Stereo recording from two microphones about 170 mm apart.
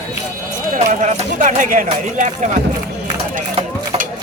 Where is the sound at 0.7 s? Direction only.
50° right (ahead or behind).